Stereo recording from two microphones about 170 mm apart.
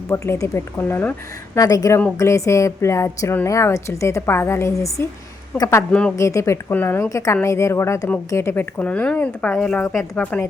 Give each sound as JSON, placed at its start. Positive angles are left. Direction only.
{"t": 0.1, "sound": "a woman's voice", "side_deg": 15}
{"t": 5.9, "sound": "speech", "side_deg": 5}
{"t": 6.1, "sound": "a woman's voice", "side_deg": 15}